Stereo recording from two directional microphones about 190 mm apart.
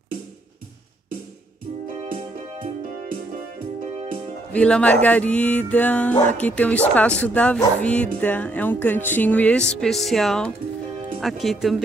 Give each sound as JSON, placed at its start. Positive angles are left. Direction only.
{"t": 3.9, "sound": "music", "side_deg": -35}
{"t": 4.5, "sound": "speech", "side_deg": 5}